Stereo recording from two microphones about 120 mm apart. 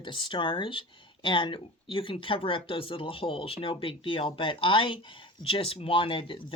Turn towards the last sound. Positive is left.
turn(degrees=45)  # may be behind; listen again after turning